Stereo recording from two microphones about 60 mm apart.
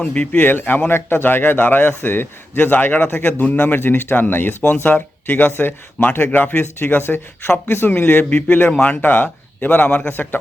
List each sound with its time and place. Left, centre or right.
0.0 s a man's voice: centre
0.3 s a man's voice: left